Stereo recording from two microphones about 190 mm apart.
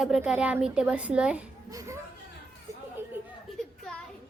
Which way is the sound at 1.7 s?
15° right (ahead or behind).